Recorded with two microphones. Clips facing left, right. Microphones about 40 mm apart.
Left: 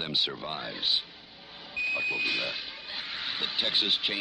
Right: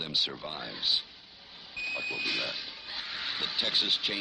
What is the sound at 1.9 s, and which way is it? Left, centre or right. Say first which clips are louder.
Speech: left 4 dB; centre.